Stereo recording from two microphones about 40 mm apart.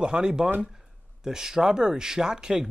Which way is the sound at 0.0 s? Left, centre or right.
Right.